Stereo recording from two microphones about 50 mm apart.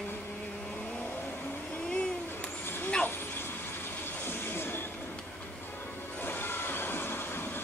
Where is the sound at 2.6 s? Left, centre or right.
Left.